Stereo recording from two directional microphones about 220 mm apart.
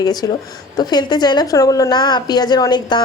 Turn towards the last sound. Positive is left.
turn(degrees=20)  # may be behind; listen again after turning